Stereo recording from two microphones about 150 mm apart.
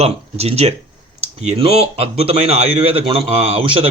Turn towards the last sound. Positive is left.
turn(degrees=-40)  # may be behind; listen again after turning